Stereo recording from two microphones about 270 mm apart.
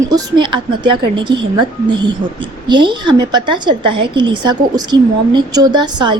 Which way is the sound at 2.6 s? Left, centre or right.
Centre.